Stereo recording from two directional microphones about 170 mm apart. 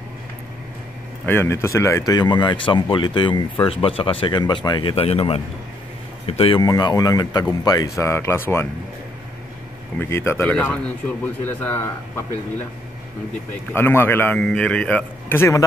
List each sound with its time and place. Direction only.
1.2 s a man's voice: 15° left (ahead or behind)
9.9 s a man's voice: 15° left (ahead or behind)
13.7 s a man's voice: 15° left (ahead or behind)